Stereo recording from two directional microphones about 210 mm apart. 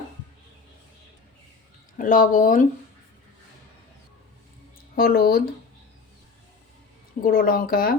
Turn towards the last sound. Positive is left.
turn(degrees=45)  # may be behind; listen again after turning